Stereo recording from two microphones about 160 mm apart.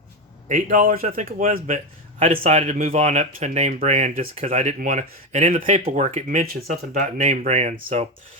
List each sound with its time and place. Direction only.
0.4 s a man's voice: 55° right (ahead or behind)
6.2 s a man's voice: 65° right (ahead or behind)
7.2 s speech: 45° right (ahead or behind)